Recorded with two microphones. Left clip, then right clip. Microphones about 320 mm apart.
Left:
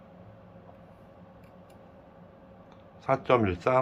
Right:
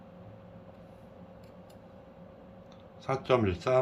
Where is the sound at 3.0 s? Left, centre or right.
Centre.